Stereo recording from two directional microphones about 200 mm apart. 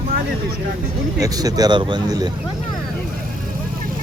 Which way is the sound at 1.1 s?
20° right (ahead or behind).